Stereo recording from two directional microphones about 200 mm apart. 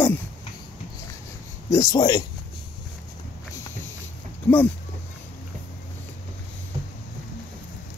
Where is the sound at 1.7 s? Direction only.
20° left (ahead or behind).